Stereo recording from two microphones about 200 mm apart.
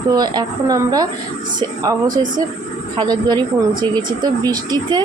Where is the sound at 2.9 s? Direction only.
20° right (ahead or behind).